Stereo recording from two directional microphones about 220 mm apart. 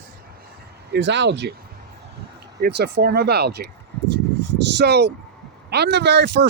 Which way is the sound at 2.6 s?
45° right (ahead or behind).